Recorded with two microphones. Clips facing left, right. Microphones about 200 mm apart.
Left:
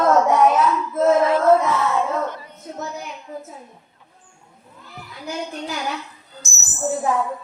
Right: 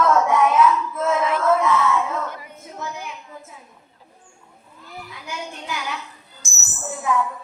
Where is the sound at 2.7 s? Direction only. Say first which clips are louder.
Left 2 dB; 35° left (ahead or behind).